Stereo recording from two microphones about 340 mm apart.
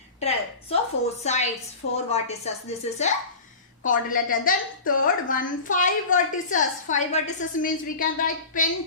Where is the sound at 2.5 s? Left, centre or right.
Centre.